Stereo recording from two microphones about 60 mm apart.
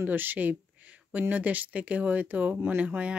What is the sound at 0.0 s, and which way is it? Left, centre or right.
Speech, right.